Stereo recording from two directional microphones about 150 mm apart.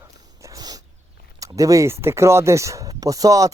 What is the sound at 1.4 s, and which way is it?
Speech, 20° right (ahead or behind).